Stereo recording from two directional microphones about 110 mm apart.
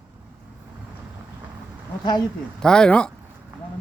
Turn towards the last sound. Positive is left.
turn(degrees=10)  # may be behind; listen again after turning